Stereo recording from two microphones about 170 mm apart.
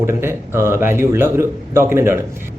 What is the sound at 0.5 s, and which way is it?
A man's voice, 15° right (ahead or behind).